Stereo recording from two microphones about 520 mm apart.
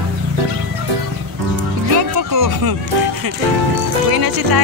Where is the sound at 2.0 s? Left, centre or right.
Right.